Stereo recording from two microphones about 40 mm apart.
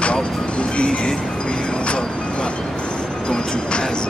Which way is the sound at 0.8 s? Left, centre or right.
Left.